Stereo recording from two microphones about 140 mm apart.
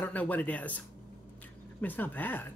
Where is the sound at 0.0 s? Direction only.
10° left (ahead or behind).